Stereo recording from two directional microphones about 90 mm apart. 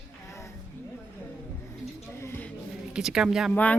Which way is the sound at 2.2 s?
25° left (ahead or behind).